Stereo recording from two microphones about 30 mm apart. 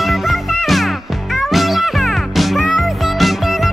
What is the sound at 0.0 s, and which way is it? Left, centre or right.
Music, centre.